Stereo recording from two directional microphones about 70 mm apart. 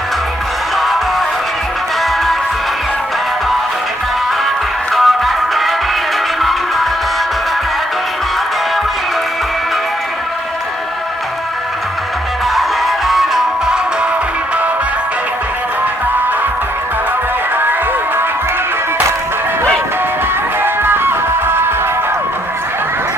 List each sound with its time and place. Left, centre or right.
4.9 s music: centre
12.5 s music: centre
20.6 s music: right